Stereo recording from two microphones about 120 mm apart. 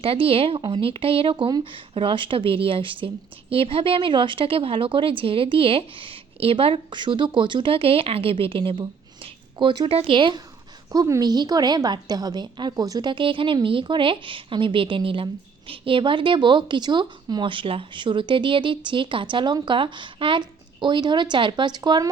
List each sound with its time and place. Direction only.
0.0 s a woman's voice: 50° right (ahead or behind)
10.9 s a woman's voice: 30° right (ahead or behind)